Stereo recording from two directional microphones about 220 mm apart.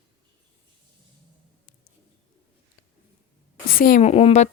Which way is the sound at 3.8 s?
35° left (ahead or behind).